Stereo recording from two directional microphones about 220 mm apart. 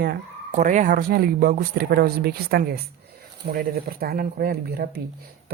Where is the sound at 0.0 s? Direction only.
40° right (ahead or behind).